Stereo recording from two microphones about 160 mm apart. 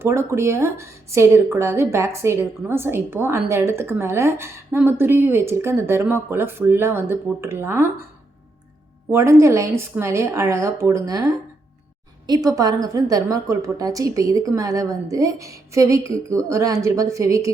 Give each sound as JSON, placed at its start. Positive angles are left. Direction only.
{"t": 0.0, "sound": "a woman's voice", "side_deg": -15}
{"t": 9.1, "sound": "a woman's voice", "side_deg": -15}